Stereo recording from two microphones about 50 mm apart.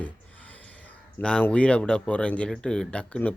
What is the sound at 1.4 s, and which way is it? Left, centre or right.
Speech, left.